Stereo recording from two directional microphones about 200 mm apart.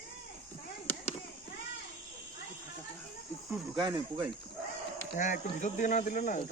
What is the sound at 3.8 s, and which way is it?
Speech, 25° right (ahead or behind).